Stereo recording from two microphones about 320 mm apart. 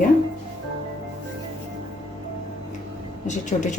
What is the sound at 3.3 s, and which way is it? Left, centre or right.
Speech, left.